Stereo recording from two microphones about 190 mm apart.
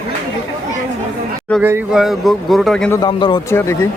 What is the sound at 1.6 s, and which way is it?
A man's voice, 10° right (ahead or behind).